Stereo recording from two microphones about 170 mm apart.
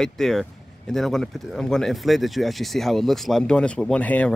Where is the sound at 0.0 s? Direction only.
Centre (ahead or behind).